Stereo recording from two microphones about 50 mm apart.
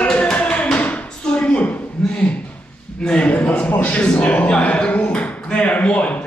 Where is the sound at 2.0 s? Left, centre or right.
Centre.